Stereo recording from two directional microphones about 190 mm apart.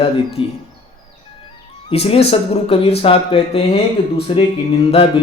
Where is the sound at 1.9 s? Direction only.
30° left (ahead or behind).